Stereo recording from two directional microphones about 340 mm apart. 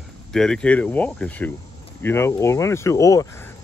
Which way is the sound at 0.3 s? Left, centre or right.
Centre.